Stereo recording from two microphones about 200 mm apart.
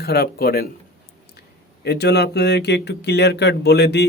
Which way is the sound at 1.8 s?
55° left (ahead or behind).